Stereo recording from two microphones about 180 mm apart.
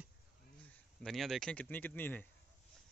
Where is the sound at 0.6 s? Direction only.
Centre (ahead or behind).